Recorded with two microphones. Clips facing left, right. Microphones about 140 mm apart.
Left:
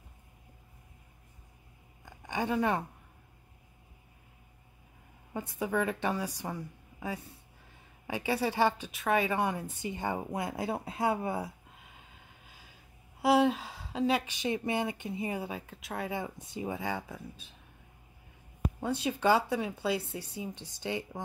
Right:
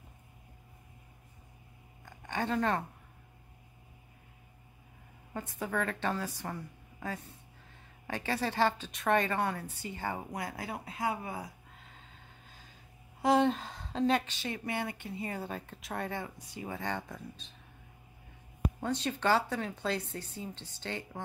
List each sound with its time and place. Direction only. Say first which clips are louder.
2.0 s a sound: left 1 dB; 10° left (ahead or behind)
5.3 s a woman's voice: left 3 dB; 10° left (ahead or behind); by 11.5 s 30° left (ahead or behind)
11.8 s vehicle: even; 10° left (ahead or behind)
13.2 s speech: left 1 dB; 5° left (ahead or behind)
16.3 s a woman's voice: left 5 dB; 25° left (ahead or behind)
16.7 s speech: left 1 dB; 10° left (ahead or behind)
18.8 s speech: left 3 dB; 10° left (ahead or behind)